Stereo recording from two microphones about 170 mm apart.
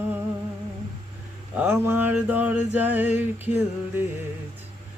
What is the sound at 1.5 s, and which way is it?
Mantra, 10° right (ahead or behind).